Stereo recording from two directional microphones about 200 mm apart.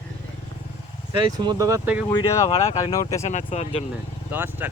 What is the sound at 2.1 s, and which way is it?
Speech, 20° left (ahead or behind).